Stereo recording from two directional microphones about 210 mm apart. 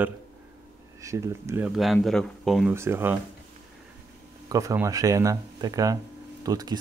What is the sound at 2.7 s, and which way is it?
Speech, 10° right (ahead or behind).